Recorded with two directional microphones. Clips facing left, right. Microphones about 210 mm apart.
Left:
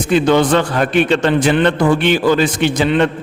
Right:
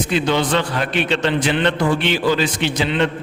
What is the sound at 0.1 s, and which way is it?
A man's voice, 50° left (ahead or behind).